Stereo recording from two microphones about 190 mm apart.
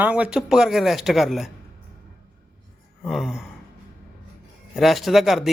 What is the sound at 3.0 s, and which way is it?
Speech, centre (ahead or behind).